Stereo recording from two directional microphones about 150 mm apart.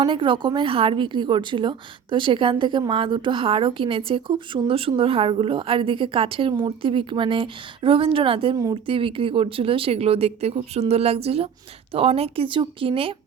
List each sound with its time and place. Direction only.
0.0 s a woman's voice: 35° right (ahead or behind)